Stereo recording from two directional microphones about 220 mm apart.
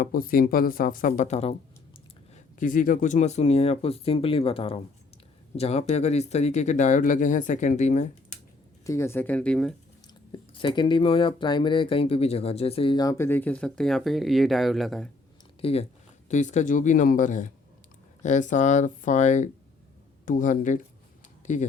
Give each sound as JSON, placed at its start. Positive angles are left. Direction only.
{"t": 0.0, "sound": "speech", "side_deg": 40}
{"t": 8.8, "sound": "speech", "side_deg": 15}
{"t": 10.3, "sound": "speech", "side_deg": 20}
{"t": 15.6, "sound": "speech", "side_deg": 25}